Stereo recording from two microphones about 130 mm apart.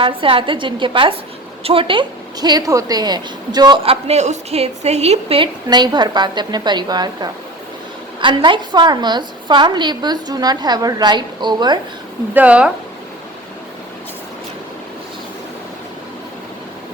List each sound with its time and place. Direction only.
0.0 s a woman's voice: 45° right (ahead or behind)
3.8 s a woman's voice: 55° right (ahead or behind)
5.6 s a woman's voice: 35° right (ahead or behind)
12.3 s speech: 10° right (ahead or behind)